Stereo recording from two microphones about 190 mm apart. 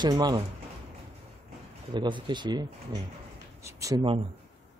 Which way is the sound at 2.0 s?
25° right (ahead or behind).